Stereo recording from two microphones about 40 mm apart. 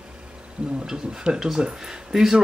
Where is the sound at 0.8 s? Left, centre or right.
Centre.